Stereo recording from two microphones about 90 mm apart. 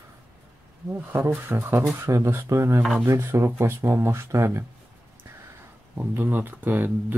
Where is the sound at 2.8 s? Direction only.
5° right (ahead or behind).